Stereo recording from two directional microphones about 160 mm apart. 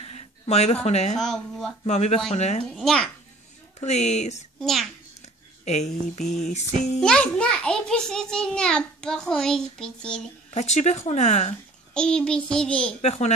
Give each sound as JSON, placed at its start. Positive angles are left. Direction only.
{"t": 0.0, "sound": "a sound", "side_deg": 40}
{"t": 0.8, "sound": "speech", "side_deg": 45}
{"t": 1.2, "sound": "a child's voice", "side_deg": 0}
{"t": 1.9, "sound": "speech", "side_deg": 45}
{"t": 2.6, "sound": "a child's voice", "side_deg": 0}
{"t": 3.8, "sound": "speech", "side_deg": 45}
{"t": 4.6, "sound": "a child's voice", "side_deg": 0}
{"t": 5.2, "sound": "a sound", "side_deg": 45}
{"t": 6.2, "sound": "a child's voice", "side_deg": 0}
{"t": 10.5, "sound": "speech", "side_deg": 45}
{"t": 11.9, "sound": "a child's voice", "side_deg": 5}
{"t": 13.0, "sound": "speech", "side_deg": 45}